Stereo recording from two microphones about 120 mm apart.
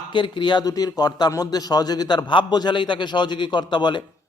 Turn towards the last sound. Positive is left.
turn(degrees=40)  # may be behind; listen again after turning